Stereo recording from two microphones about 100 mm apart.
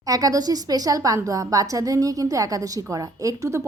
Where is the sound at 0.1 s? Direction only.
35° right (ahead or behind).